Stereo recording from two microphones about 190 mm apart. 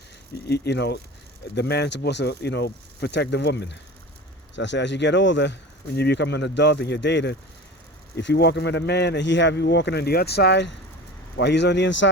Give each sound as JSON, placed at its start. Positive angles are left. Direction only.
{"t": 0.4, "sound": "speech", "side_deg": 60}